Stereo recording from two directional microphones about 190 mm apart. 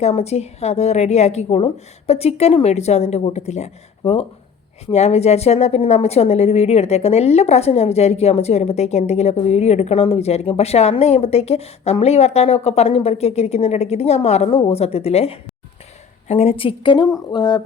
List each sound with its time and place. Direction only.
0.0 s a woman's voice: 35° left (ahead or behind)